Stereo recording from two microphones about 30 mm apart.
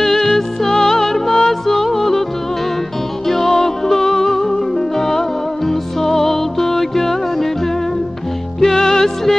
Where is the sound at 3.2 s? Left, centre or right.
Centre.